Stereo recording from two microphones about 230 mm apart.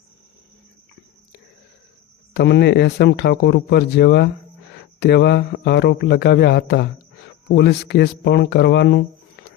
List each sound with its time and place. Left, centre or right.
2.3 s speech: left